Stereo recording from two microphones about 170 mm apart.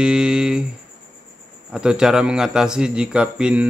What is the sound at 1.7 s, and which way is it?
A man's voice, 5° right (ahead or behind).